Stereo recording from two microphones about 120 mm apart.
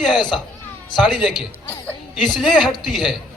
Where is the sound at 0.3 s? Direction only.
5° right (ahead or behind).